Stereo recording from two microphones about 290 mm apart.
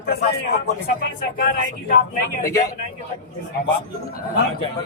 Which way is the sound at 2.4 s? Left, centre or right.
Left.